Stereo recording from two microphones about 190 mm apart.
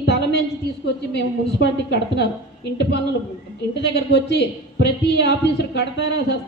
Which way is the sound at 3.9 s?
60° left (ahead or behind).